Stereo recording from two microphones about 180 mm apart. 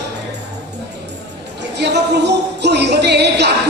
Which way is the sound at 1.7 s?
70° right (ahead or behind).